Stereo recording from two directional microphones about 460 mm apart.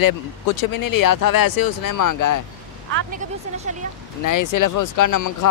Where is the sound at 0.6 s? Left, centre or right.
Left.